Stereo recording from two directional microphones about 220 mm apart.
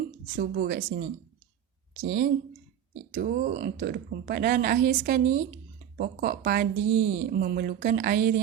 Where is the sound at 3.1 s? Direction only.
40° right (ahead or behind).